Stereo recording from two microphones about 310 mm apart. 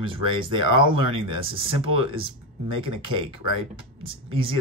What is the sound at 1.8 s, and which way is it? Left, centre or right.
Speech, centre.